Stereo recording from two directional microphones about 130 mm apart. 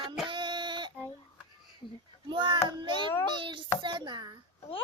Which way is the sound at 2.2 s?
35° right (ahead or behind).